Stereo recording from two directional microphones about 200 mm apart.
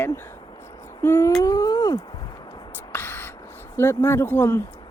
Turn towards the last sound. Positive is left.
turn(degrees=10)  # may be behind; listen again after turning